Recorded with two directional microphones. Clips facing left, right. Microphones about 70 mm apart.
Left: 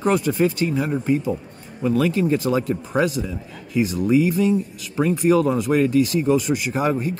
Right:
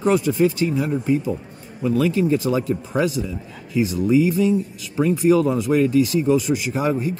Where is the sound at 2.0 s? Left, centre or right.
Left.